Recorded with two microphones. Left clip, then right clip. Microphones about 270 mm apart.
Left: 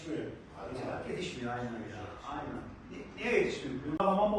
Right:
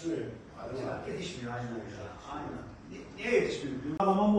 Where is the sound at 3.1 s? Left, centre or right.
Centre.